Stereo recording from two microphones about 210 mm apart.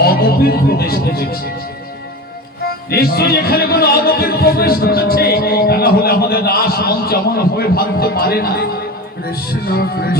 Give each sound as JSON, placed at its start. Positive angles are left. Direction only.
{"t": 0.0, "sound": "speech", "side_deg": 45}
{"t": 2.9, "sound": "speech", "side_deg": 45}